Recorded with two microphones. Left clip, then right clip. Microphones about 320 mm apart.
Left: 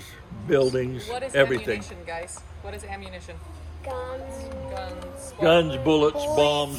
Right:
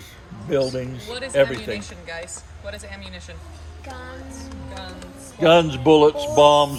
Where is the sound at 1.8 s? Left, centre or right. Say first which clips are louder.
Right 1 dB; centre.